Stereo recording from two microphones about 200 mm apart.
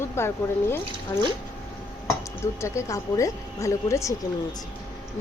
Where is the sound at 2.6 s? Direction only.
15° left (ahead or behind).